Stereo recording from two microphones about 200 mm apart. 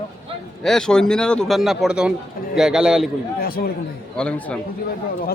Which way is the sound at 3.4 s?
50° left (ahead or behind).